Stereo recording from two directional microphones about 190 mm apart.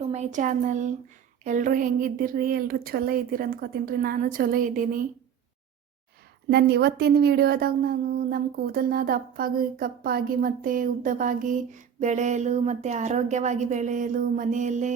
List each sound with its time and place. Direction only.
0.1 s a woman's voice: 40° right (ahead or behind)
6.5 s a woman's voice: 55° right (ahead or behind); by 14.9 s 40° right (ahead or behind)